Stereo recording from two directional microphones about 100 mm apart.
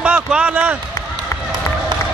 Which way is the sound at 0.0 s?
10° right (ahead or behind).